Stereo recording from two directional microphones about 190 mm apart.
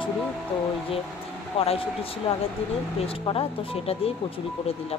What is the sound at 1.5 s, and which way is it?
Speech, 30° left (ahead or behind).